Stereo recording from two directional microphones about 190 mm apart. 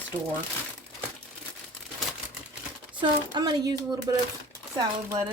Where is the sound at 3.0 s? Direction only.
25° right (ahead or behind).